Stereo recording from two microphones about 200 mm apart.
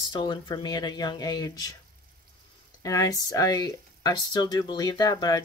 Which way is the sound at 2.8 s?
15° left (ahead or behind).